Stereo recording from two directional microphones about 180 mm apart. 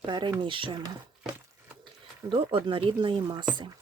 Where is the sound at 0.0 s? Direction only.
25° right (ahead or behind).